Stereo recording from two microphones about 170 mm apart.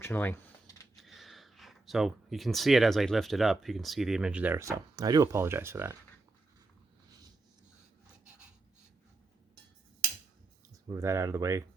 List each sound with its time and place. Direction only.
0.0 s a sound: 10° left (ahead or behind)
0.9 s speech: centre (ahead or behind)
10.7 s speech: 20° right (ahead or behind)